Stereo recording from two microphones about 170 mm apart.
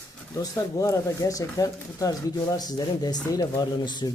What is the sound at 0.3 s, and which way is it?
Speech, 20° left (ahead or behind).